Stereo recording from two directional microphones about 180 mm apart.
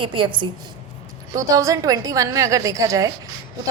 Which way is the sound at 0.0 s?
30° right (ahead or behind).